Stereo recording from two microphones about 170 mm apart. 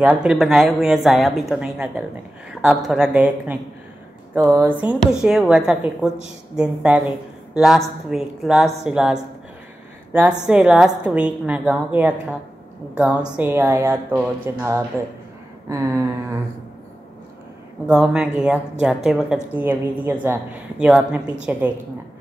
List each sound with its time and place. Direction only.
0.0 s a woman's voice: 5° right (ahead or behind)
17.8 s a woman's voice: 5° right (ahead or behind)